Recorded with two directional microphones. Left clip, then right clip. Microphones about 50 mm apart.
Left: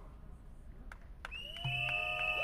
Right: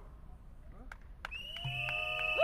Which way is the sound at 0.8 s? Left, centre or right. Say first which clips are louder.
Right 3 dB; right.